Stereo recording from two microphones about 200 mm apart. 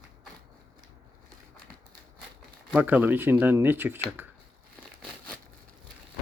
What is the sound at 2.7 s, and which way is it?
Speech, 10° right (ahead or behind).